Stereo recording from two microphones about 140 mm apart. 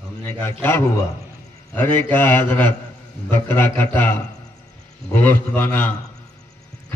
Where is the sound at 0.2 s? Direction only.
15° left (ahead or behind).